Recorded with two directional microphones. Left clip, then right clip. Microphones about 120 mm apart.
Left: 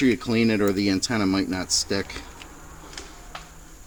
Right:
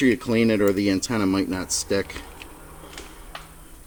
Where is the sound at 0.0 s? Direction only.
30° left (ahead or behind).